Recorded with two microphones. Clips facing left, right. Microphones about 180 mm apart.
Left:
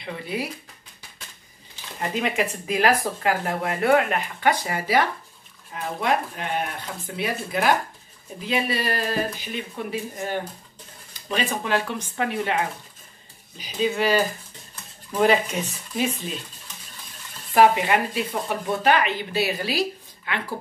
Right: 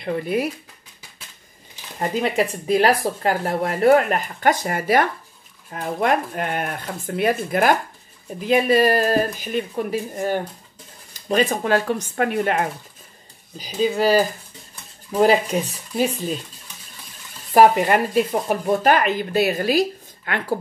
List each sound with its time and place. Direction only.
0.0 s speech: 50° right (ahead or behind)
2.0 s speech: 35° right (ahead or behind)
13.6 s speech: 40° right (ahead or behind)
17.6 s speech: 45° right (ahead or behind)